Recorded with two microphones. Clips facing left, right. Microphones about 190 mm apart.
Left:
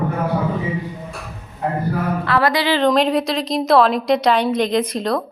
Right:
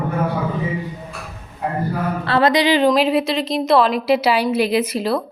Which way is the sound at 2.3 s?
25° right (ahead or behind).